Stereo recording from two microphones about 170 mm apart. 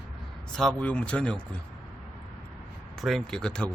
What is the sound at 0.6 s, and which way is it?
Speech, 5° left (ahead or behind).